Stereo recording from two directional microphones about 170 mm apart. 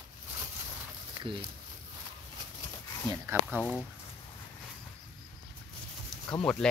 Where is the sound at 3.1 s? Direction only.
15° right (ahead or behind).